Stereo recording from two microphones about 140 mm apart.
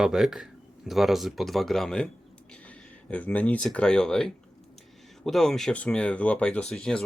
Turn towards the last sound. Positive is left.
turn(degrees=5)  # may be behind; listen again after turning